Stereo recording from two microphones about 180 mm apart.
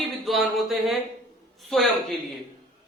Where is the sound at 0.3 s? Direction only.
Centre (ahead or behind).